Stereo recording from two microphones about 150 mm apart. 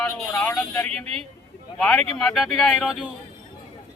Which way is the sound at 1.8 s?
5° left (ahead or behind).